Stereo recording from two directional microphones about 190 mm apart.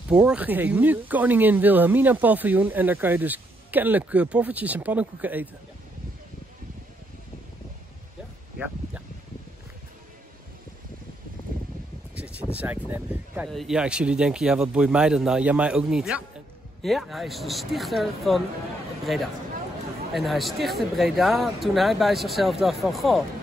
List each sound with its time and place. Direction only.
0.1 s speech: 5° right (ahead or behind)
11.5 s a sound: 50° right (ahead or behind)
12.2 s speech: 5° right (ahead or behind)
20.1 s speech: centre (ahead or behind)